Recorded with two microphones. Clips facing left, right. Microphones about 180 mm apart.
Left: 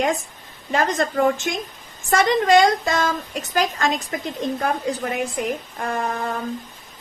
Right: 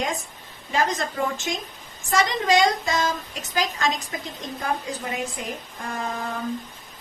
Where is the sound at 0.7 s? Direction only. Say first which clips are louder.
Left 4 dB; 60° left (ahead or behind).